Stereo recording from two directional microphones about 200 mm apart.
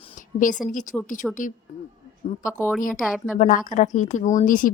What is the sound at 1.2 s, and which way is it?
Speech, centre (ahead or behind).